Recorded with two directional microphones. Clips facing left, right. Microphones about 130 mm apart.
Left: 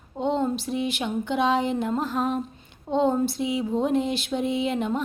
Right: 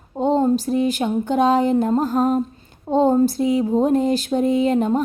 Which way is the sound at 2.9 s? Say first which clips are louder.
Right 6 dB; 40° right (ahead or behind).